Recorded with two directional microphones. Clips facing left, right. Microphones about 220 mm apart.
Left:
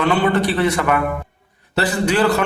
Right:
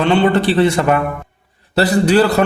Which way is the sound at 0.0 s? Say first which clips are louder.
Right 4 dB; 30° right (ahead or behind).